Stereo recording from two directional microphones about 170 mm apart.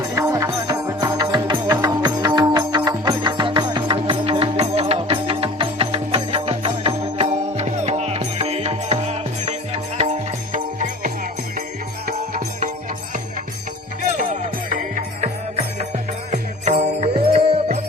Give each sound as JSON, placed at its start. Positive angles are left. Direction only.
{"t": 0.0, "sound": "music", "side_deg": -20}
{"t": 12.0, "sound": "music", "side_deg": -50}
{"t": 14.2, "sound": "music", "side_deg": -50}